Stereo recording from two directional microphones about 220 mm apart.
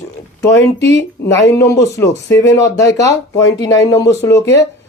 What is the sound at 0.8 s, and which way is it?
Speech, 55° left (ahead or behind).